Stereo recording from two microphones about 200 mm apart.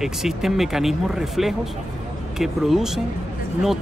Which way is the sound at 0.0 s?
Centre (ahead or behind).